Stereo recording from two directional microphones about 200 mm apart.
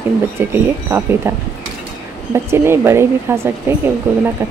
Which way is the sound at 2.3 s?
10° right (ahead or behind).